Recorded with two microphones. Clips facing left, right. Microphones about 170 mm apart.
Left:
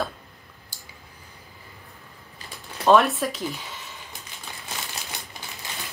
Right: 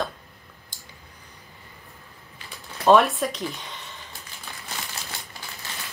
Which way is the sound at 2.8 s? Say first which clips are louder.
Right 1 dB; centre (ahead or behind).